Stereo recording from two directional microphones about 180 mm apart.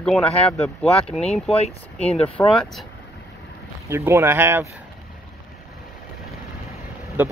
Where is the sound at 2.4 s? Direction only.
5° left (ahead or behind).